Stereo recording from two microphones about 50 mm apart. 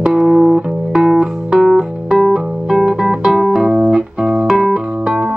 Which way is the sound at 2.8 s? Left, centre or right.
Centre.